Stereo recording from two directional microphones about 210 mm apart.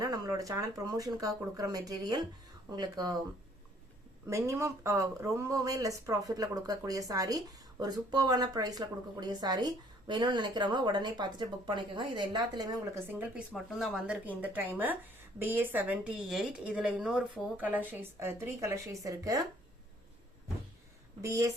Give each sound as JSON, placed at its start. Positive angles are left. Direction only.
{"t": 0.0, "sound": "a woman's voice", "side_deg": -20}
{"t": 4.3, "sound": "a woman's voice", "side_deg": -15}
{"t": 21.2, "sound": "speech", "side_deg": -15}